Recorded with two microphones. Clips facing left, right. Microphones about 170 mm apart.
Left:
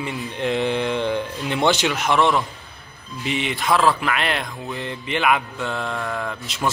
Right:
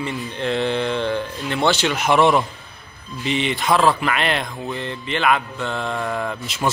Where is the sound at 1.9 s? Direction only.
5° right (ahead or behind).